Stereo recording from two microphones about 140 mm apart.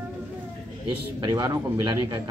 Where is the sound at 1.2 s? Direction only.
20° right (ahead or behind).